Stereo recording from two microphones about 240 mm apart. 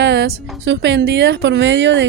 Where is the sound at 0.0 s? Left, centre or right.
Right.